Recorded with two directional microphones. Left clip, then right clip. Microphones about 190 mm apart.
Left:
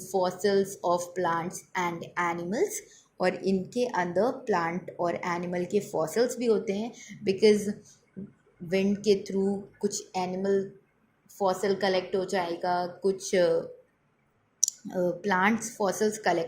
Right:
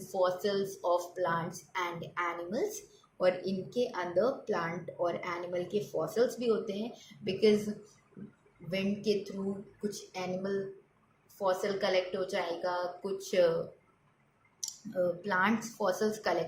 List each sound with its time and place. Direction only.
0.1 s a woman's voice: 35° left (ahead or behind)
8.7 s a woman's voice: 35° left (ahead or behind)
15.2 s a woman's voice: 40° left (ahead or behind)